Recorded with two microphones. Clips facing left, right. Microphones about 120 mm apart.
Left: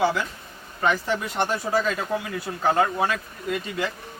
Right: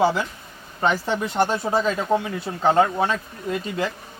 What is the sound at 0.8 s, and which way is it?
Speech, 30° right (ahead or behind).